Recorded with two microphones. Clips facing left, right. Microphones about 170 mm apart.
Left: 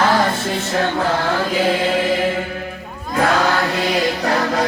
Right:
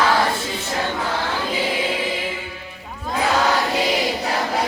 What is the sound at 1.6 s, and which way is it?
Choir, 80° left.